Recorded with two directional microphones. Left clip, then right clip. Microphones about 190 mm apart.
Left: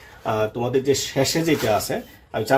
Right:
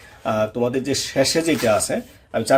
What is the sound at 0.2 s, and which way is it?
Speech, 40° right (ahead or behind).